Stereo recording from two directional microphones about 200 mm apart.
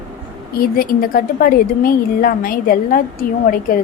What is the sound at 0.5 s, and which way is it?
A woman's voice, 45° left (ahead or behind).